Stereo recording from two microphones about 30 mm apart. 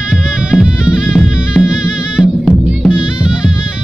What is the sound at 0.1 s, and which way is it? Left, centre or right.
Music, right.